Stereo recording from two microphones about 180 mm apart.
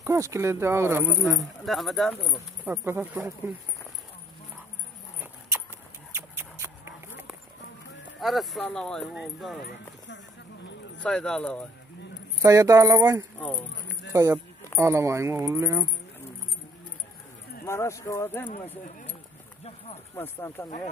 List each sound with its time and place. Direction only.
0.0 s speech: 15° right (ahead or behind)
1.6 s speech: centre (ahead or behind)
2.6 s speech: 10° right (ahead or behind)
6.1 s a sound: 15° right (ahead or behind)
8.2 s speech: centre (ahead or behind)
10.0 s clip-clop: 80° left
11.0 s speech: 5° left (ahead or behind)
12.4 s speech: 20° right (ahead or behind)
17.6 s speech: 15° left (ahead or behind)
20.2 s speech: 15° left (ahead or behind)